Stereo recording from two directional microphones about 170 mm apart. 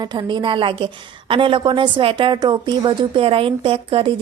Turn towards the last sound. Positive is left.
turn(degrees=-30)  # may be behind; listen again after turning